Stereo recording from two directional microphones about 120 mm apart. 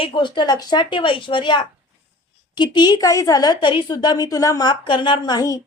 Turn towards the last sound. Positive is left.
turn(degrees=30)  # may be behind; listen again after turning